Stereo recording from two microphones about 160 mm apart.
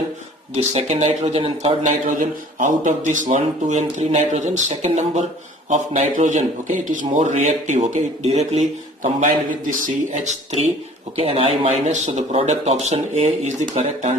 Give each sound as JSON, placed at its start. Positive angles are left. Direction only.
{"t": 0.5, "sound": "a man's voice", "side_deg": -40}
{"t": 9.2, "sound": "a man's voice", "side_deg": -55}
{"t": 11.2, "sound": "a man's voice", "side_deg": -35}